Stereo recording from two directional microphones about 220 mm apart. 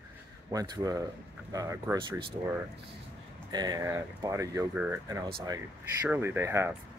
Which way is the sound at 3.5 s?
20° right (ahead or behind).